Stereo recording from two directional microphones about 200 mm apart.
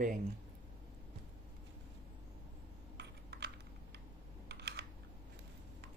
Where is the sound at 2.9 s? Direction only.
55° right (ahead or behind).